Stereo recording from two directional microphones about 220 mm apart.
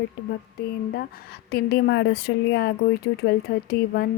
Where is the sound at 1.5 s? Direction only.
50° left (ahead or behind).